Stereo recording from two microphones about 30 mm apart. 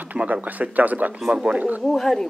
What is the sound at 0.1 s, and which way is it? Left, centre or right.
Speech, right.